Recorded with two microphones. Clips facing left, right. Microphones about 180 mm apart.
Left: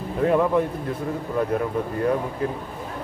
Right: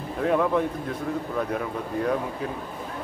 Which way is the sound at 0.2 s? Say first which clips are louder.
Left 3 dB; centre (ahead or behind).